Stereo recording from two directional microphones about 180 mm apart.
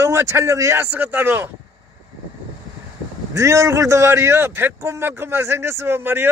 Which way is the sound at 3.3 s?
15° right (ahead or behind).